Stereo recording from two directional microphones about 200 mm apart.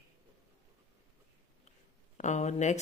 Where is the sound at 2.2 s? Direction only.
35° left (ahead or behind).